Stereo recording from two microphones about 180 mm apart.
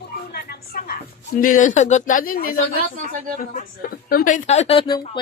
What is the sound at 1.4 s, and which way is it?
A woman's voice, 45° left (ahead or behind).